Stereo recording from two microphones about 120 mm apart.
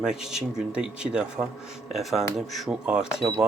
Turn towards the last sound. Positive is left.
turn(degrees=-5)  # may be behind; listen again after turning